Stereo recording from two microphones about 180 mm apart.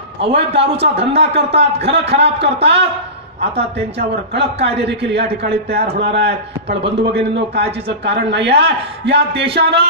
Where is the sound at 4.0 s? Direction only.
70° right (ahead or behind).